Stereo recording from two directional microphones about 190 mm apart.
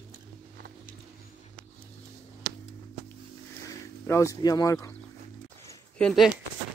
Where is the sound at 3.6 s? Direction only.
15° left (ahead or behind).